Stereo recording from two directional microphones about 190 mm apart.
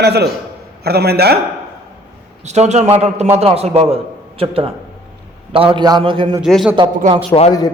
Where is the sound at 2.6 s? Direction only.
35° right (ahead or behind).